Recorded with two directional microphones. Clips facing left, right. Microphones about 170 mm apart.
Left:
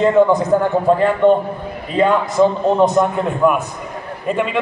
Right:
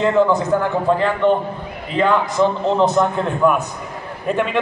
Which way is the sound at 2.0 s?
15° left (ahead or behind).